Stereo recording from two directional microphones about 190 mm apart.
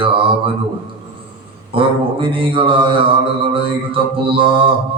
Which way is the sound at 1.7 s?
30° right (ahead or behind).